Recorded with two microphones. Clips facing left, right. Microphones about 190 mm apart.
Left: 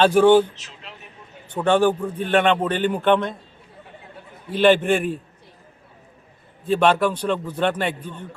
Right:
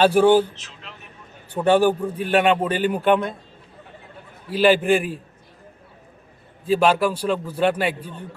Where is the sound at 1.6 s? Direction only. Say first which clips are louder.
Right 1 dB; 10° right (ahead or behind).